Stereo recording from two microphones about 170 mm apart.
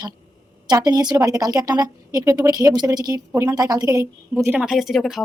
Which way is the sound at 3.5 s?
20° right (ahead or behind).